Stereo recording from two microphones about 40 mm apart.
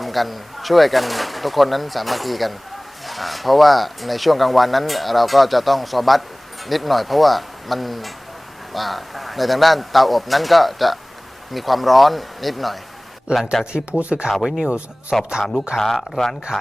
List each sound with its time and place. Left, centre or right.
0.0 s speech: centre
13.3 s speech: right
14.3 s speech: centre
15.2 s speech: centre
15.8 s speech: centre